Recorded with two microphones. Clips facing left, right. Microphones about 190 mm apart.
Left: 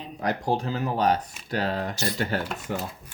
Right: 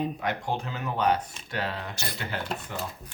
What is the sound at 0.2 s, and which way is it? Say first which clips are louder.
Speech: left 4 dB; 35° left (ahead or behind).